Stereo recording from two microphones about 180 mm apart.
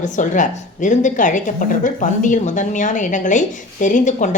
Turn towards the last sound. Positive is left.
turn(degrees=45)  # may be behind; listen again after turning